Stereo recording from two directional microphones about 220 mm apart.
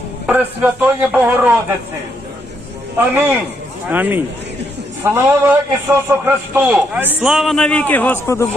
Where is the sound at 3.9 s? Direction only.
10° right (ahead or behind); by 8.4 s 10° left (ahead or behind).